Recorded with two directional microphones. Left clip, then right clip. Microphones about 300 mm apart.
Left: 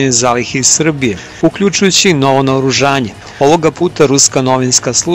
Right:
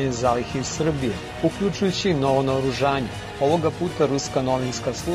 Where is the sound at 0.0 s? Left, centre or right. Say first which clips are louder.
Left 10 dB; left.